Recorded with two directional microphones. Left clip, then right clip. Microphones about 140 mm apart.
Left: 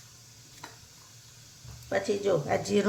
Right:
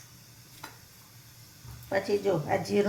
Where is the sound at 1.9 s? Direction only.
45° left (ahead or behind).